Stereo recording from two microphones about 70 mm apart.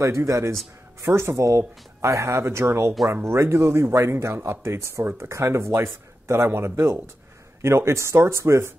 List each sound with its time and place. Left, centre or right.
0.0 s speech: right